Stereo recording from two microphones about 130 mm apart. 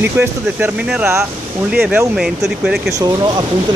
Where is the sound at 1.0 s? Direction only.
20° right (ahead or behind).